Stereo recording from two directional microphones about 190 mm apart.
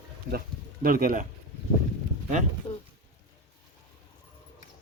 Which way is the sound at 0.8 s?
45° right (ahead or behind).